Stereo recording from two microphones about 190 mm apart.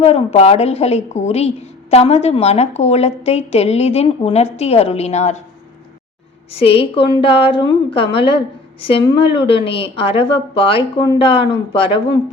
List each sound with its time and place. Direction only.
0.0 s a woman's voice: 35° left (ahead or behind)
6.5 s a woman's voice: 30° left (ahead or behind)